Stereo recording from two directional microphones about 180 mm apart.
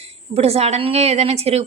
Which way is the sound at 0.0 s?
35° right (ahead or behind).